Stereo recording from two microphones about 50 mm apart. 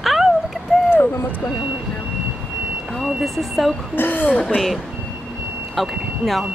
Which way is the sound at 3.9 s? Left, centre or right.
Left.